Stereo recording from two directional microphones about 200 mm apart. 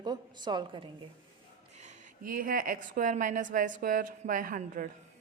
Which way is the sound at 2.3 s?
45° right (ahead or behind).